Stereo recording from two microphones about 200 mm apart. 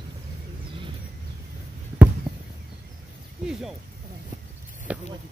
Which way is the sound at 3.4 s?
Centre (ahead or behind).